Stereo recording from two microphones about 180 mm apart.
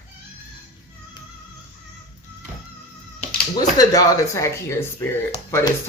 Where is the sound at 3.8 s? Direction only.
20° left (ahead or behind).